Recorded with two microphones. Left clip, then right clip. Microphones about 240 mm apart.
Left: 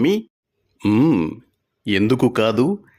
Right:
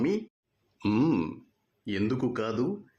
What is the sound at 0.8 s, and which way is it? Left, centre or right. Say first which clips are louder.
Speech: left 10 dB; left.